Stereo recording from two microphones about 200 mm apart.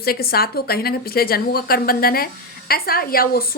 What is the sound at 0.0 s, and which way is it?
A woman's voice, 50° left (ahead or behind).